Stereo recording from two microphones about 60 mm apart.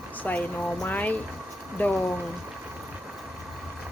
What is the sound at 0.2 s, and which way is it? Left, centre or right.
Speech, left.